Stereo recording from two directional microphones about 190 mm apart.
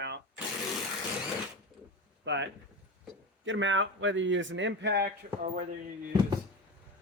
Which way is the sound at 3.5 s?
80° right.